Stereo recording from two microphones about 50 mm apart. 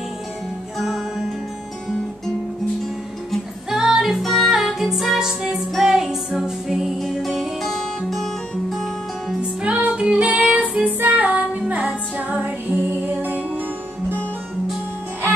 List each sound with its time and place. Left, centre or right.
0.7 s music: centre
3.7 s music: centre
4.2 s music: centre
6.4 s music: centre
7.0 s music: centre
9.6 s music: right